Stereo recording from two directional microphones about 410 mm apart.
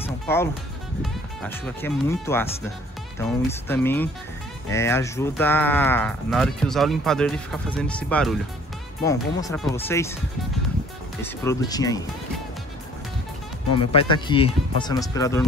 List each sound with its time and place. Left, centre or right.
0.0 s music: centre
1.0 s speech: centre
11.2 s speech: centre
13.7 s speech: centre